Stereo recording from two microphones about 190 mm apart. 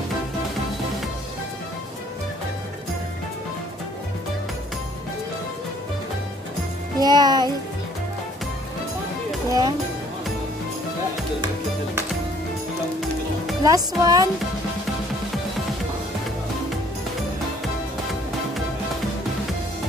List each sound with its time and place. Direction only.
7.0 s speech: 20° right (ahead or behind)
9.5 s speech: 15° right (ahead or behind)
13.7 s speech: 20° right (ahead or behind)